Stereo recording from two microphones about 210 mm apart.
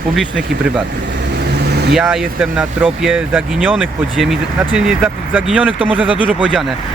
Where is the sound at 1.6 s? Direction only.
50° right (ahead or behind).